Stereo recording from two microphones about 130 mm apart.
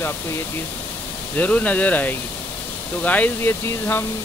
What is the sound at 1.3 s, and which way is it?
Speech, 10° left (ahead or behind).